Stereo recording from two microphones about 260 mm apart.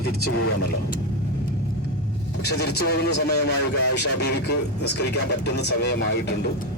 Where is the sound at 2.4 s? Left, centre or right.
Left.